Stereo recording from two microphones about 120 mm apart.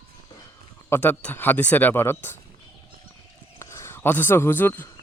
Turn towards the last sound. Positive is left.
turn(degrees=20)  # may be behind; listen again after turning